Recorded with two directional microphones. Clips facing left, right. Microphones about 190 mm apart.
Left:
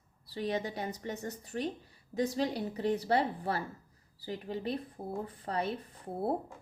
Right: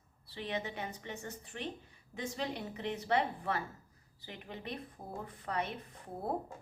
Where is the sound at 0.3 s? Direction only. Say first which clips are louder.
Left 5 dB; 40° left (ahead or behind).